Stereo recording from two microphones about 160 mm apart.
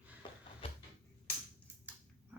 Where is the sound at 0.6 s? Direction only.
35° left (ahead or behind).